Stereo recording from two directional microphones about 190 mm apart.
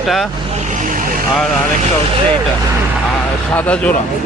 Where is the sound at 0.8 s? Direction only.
45° right (ahead or behind).